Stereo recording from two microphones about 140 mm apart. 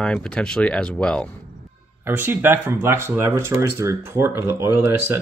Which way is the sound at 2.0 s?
15° right (ahead or behind).